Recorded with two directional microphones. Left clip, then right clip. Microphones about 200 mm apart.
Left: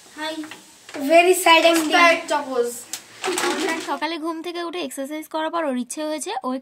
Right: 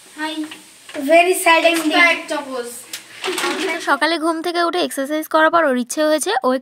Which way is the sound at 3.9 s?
35° right (ahead or behind).